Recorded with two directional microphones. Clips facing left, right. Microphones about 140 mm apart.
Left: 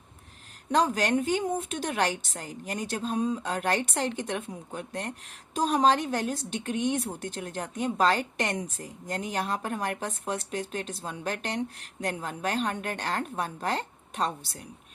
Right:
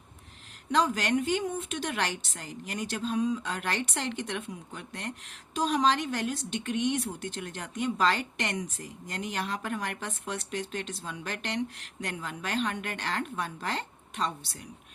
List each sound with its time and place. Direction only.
0.7 s speech: 40° left (ahead or behind)